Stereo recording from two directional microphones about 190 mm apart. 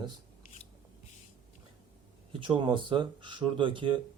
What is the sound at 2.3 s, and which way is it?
Speech, 25° right (ahead or behind).